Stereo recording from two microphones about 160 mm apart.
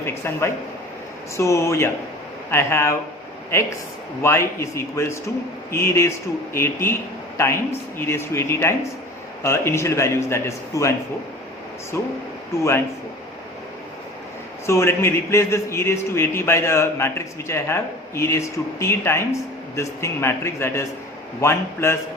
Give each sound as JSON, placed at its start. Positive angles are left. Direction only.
{"t": 0.0, "sound": "a man's voice", "side_deg": 15}
{"t": 4.2, "sound": "a man's voice", "side_deg": 15}
{"t": 11.9, "sound": "a man's voice", "side_deg": 15}
{"t": 14.7, "sound": "a man's voice", "side_deg": 15}